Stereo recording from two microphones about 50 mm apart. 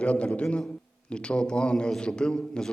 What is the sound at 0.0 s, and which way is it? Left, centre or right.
A man's voice, left.